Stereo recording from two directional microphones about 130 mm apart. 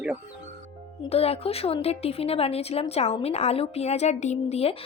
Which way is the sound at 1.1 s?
50° left (ahead or behind).